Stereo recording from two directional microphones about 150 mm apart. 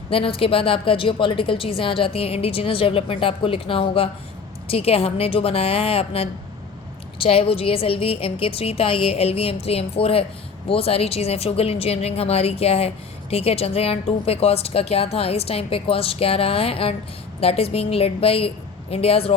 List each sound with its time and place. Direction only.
0.1 s a woman's voice: 40° left (ahead or behind)